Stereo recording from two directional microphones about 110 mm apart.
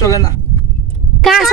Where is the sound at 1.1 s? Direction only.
Centre (ahead or behind).